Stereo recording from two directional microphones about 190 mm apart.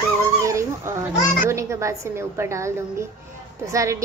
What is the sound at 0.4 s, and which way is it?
Dog, 15° right (ahead or behind).